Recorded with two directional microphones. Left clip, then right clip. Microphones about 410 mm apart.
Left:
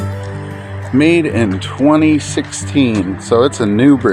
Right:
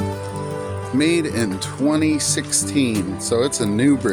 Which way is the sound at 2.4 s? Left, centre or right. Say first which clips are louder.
Left 5 dB; right.